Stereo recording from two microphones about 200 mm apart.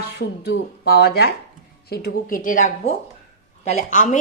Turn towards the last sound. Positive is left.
turn(degrees=35)  # may be behind; listen again after turning